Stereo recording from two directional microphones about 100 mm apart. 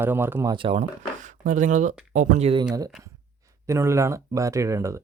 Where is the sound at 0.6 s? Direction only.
65° right (ahead or behind).